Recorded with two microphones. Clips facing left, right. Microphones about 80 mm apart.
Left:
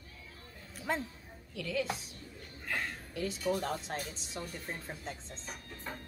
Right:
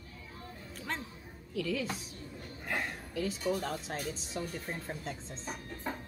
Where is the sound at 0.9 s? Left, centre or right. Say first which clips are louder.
Left 5 dB; centre.